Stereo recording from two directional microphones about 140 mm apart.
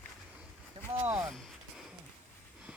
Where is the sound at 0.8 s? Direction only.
35° right (ahead or behind).